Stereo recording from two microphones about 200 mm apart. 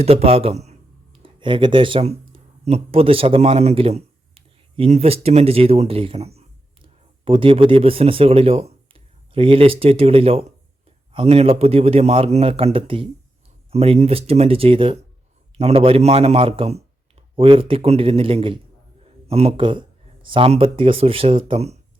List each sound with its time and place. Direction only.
0.0 s a man's voice: 30° right (ahead or behind)